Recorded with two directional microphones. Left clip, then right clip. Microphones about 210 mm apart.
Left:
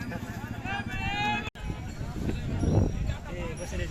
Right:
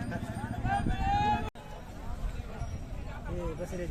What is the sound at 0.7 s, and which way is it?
Clip-clop, 35° right (ahead or behind).